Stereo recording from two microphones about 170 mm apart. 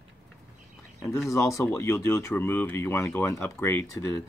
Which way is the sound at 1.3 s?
20° left (ahead or behind).